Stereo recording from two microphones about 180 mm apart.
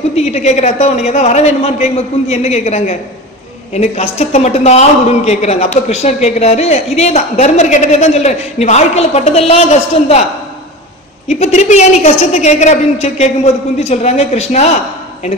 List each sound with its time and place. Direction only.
0.1 s a woman's voice: 35° left (ahead or behind)
11.2 s a woman's voice: 35° left (ahead or behind)